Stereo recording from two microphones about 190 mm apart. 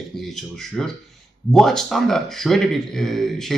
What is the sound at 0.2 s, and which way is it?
Speech, centre (ahead or behind).